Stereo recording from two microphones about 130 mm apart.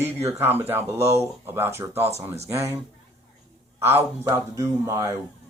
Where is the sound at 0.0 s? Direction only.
15° right (ahead or behind).